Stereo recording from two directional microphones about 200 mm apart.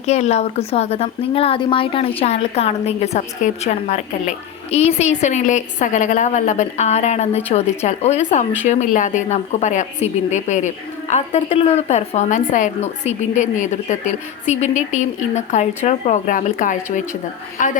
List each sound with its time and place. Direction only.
0.0 s a woman's voice: 35° left (ahead or behind)